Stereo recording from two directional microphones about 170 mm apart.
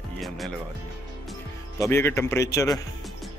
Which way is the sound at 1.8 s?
15° left (ahead or behind).